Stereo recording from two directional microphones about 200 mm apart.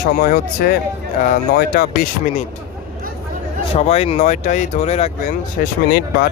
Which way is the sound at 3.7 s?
30° left (ahead or behind).